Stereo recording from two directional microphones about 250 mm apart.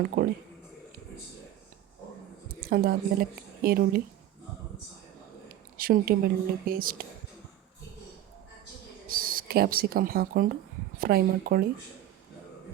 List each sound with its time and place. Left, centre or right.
0.2 s speech: right
2.6 s a woman's voice: right
5.5 s speech: right
9.0 s speech: right